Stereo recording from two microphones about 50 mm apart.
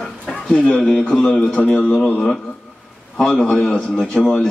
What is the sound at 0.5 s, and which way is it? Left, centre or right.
Speech, left.